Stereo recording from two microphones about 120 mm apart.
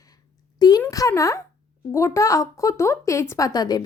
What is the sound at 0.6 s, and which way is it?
A woman's voice, 35° left (ahead or behind).